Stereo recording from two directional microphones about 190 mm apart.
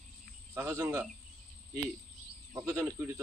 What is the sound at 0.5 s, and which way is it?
Speech, 15° right (ahead or behind).